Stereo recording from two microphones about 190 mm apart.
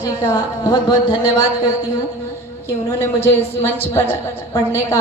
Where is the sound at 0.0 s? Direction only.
20° left (ahead or behind).